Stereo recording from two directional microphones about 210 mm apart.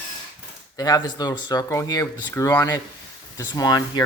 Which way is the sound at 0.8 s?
20° left (ahead or behind).